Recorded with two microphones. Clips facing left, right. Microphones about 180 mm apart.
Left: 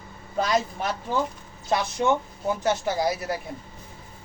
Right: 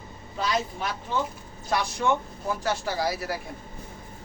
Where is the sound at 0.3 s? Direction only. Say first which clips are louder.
Left 4 dB; 50° left (ahead or behind).